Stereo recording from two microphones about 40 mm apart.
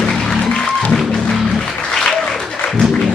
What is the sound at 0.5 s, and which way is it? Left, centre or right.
Music, left.